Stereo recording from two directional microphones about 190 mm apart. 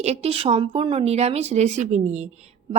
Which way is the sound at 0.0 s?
35° right (ahead or behind).